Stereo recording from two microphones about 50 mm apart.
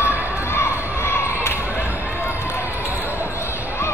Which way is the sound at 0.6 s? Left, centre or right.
Left.